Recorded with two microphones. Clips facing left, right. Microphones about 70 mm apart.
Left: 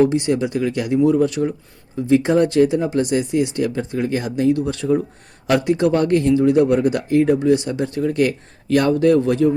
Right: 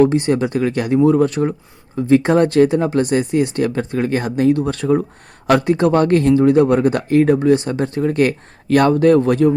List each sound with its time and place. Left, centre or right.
0.0 s speech: right